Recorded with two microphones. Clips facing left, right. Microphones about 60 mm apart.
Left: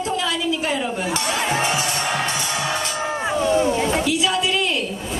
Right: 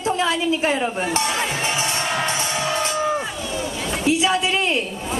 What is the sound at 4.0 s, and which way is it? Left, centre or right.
Speech, right.